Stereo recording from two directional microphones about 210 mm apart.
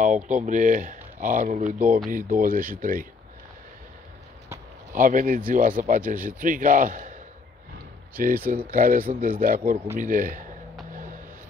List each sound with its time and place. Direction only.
0.0 s speech: 35° right (ahead or behind)
4.9 s speech: 40° right (ahead or behind)
8.2 s speech: 40° right (ahead or behind)